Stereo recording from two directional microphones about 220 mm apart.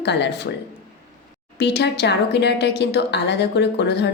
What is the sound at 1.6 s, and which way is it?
A woman's voice, 50° left (ahead or behind).